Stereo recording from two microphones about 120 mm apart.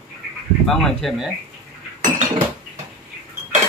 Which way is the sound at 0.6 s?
Centre (ahead or behind).